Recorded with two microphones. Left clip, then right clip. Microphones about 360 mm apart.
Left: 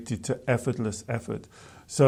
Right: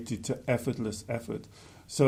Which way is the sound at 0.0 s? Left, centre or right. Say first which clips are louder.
Left 4 dB; left.